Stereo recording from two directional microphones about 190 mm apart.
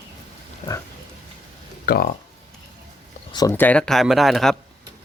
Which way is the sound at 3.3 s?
15° left (ahead or behind).